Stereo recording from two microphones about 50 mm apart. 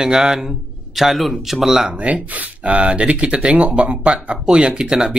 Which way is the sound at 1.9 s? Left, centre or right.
Right.